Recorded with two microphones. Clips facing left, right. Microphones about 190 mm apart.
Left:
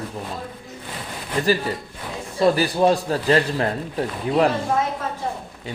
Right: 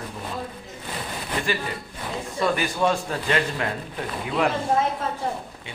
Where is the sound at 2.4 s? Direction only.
35° left (ahead or behind).